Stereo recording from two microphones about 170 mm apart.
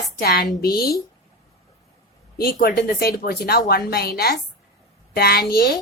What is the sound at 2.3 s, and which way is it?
A woman's voice, 65° left (ahead or behind).